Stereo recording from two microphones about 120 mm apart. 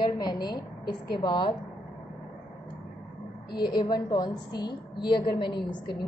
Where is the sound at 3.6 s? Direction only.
35° left (ahead or behind).